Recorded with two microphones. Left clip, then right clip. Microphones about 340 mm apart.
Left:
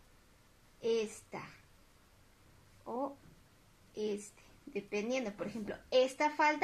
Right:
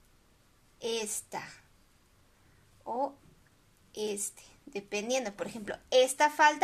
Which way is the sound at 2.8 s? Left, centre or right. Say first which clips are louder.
Right 6 dB; right.